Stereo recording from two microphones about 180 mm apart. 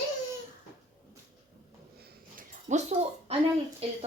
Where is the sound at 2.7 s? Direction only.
40° right (ahead or behind).